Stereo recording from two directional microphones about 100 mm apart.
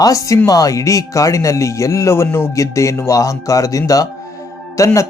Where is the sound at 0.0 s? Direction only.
35° left (ahead or behind).